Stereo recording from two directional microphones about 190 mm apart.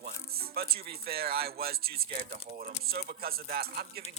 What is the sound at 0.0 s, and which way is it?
Speech, 55° right (ahead or behind).